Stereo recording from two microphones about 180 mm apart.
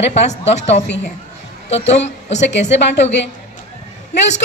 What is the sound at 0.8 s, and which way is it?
Speech, 70° left (ahead or behind).